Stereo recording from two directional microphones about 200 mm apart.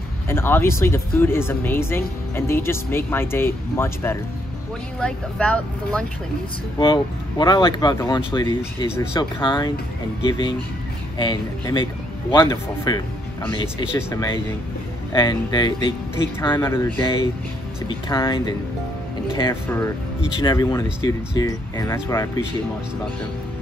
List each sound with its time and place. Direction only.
0.3 s speech: 10° left (ahead or behind)
6.8 s a man's voice: 25° left (ahead or behind)
11.1 s a man's voice: 20° left (ahead or behind)
19.5 s a man's voice: 10° left (ahead or behind)